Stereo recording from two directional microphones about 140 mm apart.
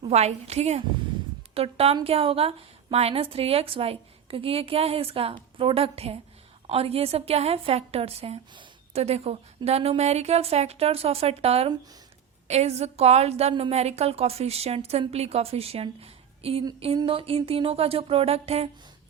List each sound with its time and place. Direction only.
0.0 s a woman's voice: 50° right (ahead or behind)